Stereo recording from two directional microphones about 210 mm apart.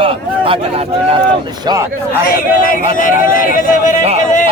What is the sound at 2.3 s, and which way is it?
Speech, 40° left (ahead or behind).